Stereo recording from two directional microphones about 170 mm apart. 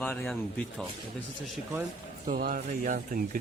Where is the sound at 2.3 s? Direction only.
55° right (ahead or behind).